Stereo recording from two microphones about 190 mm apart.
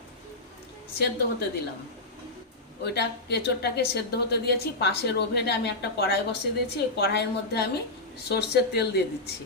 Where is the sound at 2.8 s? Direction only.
60° left (ahead or behind).